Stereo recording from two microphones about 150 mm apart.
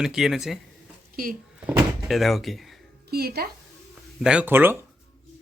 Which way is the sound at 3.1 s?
90° right.